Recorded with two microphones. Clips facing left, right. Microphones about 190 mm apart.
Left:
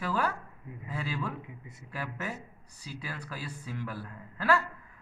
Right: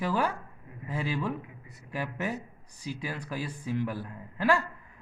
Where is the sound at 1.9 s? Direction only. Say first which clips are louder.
Right 5 dB; 15° right (ahead or behind).